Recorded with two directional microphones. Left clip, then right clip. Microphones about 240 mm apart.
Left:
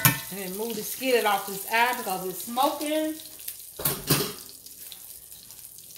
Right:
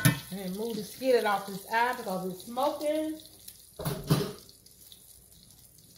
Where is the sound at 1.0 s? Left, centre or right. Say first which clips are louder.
Left 2 dB; centre.